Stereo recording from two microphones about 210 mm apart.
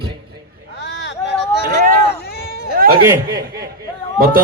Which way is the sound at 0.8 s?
55° left (ahead or behind).